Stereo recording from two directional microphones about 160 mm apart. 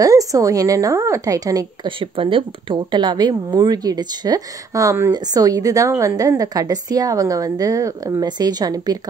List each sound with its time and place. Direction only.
0.0 s a woman's voice: 20° right (ahead or behind)